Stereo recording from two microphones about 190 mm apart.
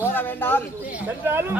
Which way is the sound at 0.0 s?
10° left (ahead or behind).